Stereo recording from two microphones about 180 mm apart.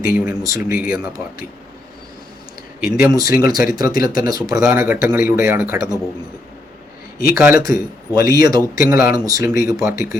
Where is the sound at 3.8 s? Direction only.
55° left (ahead or behind).